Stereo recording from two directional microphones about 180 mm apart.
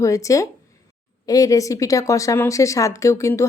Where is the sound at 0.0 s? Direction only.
15° left (ahead or behind).